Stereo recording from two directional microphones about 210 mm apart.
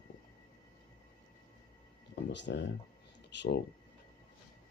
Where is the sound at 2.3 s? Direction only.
55° left (ahead or behind).